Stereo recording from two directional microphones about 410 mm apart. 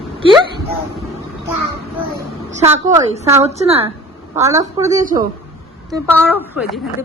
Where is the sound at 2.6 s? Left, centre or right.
Centre.